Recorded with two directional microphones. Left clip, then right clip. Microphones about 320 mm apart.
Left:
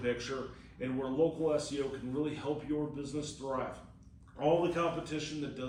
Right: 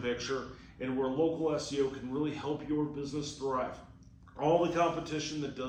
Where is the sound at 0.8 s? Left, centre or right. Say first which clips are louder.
Right 1 dB; centre.